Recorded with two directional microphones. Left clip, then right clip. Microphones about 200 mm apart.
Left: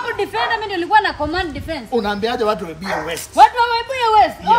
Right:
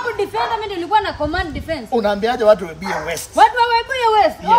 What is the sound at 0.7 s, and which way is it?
Speech, centre (ahead or behind).